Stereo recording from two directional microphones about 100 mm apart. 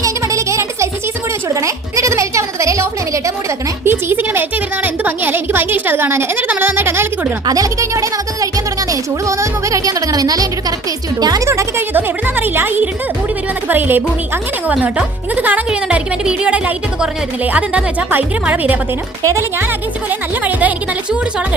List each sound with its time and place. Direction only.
0.0 s music: 30° right (ahead or behind)
1.5 s a sound: 30° right (ahead or behind)
3.8 s a woman's voice: 20° right (ahead or behind)
7.4 s speech: 35° right (ahead or behind)
11.4 s a woman's voice: 25° right (ahead or behind)
20.1 s a woman's voice: 15° right (ahead or behind)